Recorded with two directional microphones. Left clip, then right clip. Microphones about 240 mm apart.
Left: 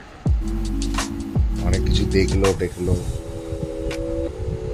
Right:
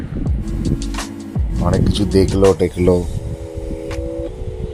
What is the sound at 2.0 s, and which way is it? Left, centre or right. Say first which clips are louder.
Speech: right 7 dB; centre.